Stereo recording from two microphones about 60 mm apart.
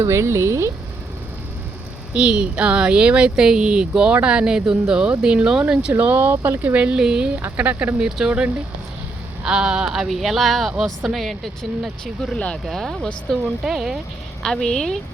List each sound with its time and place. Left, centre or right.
0.0 s speech: right
2.1 s speech: centre
5.9 s speech: right
6.6 s speech: right
7.0 s speech: centre
7.3 s speech: right
8.0 s speech: centre
13.7 s speech: centre
14.4 s a woman's voice: centre